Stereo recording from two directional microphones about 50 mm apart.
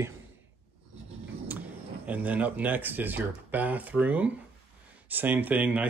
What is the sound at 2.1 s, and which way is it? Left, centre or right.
Speech, right.